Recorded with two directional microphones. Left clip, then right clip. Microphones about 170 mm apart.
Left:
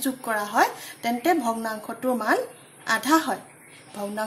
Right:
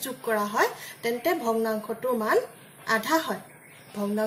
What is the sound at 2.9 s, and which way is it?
Speech, 60° left (ahead or behind).